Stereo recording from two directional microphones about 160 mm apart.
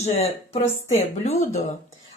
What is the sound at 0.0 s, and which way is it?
A woman's voice, 40° left (ahead or behind).